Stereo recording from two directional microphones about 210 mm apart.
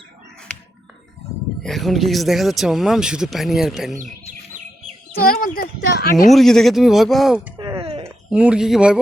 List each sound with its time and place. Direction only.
1.6 s speech: centre (ahead or behind)
5.1 s speech: 45° left (ahead or behind)
6.2 s speech: centre (ahead or behind)
7.6 s a sound: 20° right (ahead or behind)
8.0 s speech: 5° right (ahead or behind)